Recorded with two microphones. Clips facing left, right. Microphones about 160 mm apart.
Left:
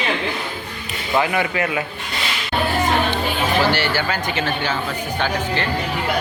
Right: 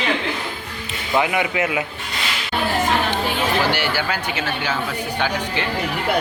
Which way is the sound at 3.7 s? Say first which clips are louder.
Left 1 dB; 10° right (ahead or behind).